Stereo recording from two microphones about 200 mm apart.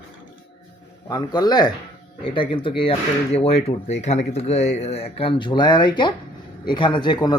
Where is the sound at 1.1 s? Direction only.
20° left (ahead or behind).